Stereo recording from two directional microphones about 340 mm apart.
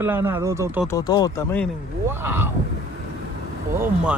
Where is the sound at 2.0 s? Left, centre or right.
Centre.